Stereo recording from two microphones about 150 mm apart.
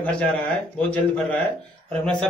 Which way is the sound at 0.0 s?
10° left (ahead or behind).